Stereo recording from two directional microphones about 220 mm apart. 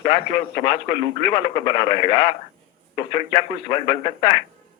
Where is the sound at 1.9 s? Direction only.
25° left (ahead or behind).